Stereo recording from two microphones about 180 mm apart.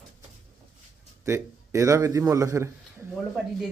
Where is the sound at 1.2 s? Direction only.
15° right (ahead or behind).